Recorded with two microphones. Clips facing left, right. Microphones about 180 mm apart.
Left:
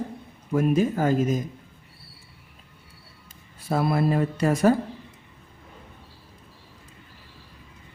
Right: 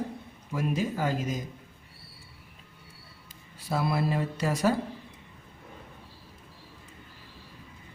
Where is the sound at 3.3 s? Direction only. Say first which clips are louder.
Left 5 dB; 50° left (ahead or behind).